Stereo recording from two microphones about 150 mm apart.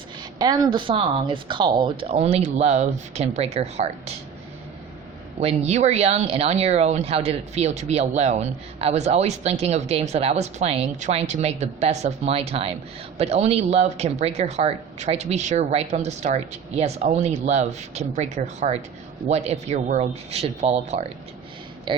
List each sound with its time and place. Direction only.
0.3 s speech: 25° right (ahead or behind); by 4.1 s 45° right (ahead or behind)
5.4 s speech: 45° right (ahead or behind)
21.9 s speech: 35° right (ahead or behind)